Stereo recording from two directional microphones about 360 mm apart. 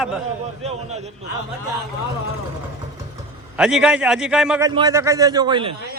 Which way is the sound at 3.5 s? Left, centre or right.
Centre.